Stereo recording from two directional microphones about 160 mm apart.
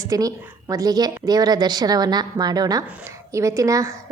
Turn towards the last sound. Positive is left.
turn(degrees=-20)  # may be behind; listen again after turning